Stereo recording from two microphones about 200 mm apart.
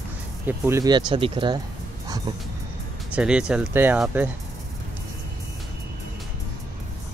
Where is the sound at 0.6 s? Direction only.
15° right (ahead or behind).